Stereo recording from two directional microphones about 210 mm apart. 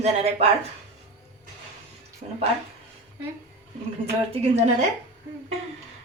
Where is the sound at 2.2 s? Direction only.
35° right (ahead or behind).